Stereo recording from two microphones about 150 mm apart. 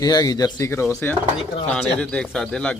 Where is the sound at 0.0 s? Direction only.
25° left (ahead or behind).